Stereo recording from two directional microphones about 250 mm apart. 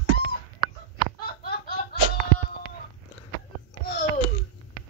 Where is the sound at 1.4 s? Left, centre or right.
Left.